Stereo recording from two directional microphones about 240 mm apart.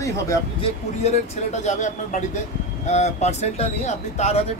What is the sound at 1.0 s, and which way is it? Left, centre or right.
Speech, left.